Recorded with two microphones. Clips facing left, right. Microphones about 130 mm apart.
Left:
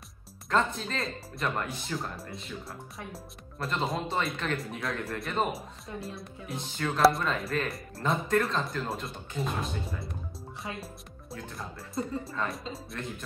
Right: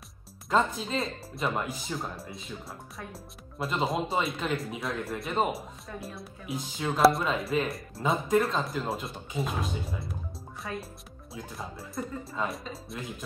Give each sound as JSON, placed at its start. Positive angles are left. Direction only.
{"t": 0.5, "sound": "speech", "side_deg": 0}
{"t": 10.6, "sound": "speech", "side_deg": 20}
{"t": 11.3, "sound": "speech", "side_deg": 0}